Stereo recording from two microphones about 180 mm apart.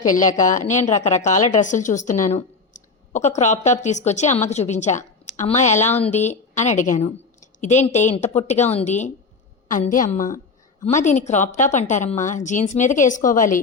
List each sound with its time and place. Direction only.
0.1 s a woman's voice: 45° left (ahead or behind)